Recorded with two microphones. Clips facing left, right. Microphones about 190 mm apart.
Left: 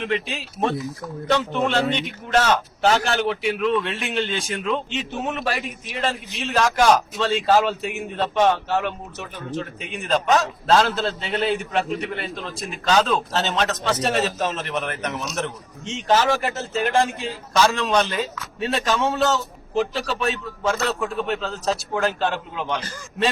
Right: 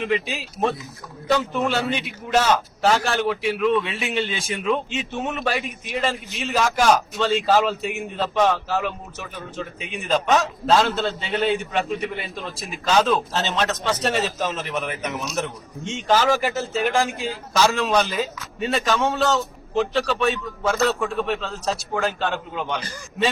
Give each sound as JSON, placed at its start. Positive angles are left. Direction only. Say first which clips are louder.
{"t": 0.0, "sound": "a man's voice", "louder": "right 1 dB", "side_deg": 0}